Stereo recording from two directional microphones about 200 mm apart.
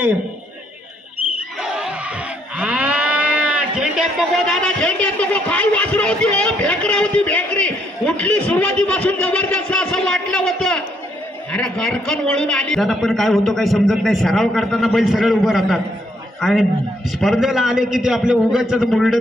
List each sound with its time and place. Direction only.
1.6 s livestock: 5° right (ahead or behind)
4.5 s a sound: 5° left (ahead or behind)
11.5 s a man's voice: 5° left (ahead or behind)